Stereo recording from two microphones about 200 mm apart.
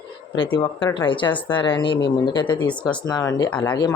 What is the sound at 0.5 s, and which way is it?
Speech, 25° left (ahead or behind).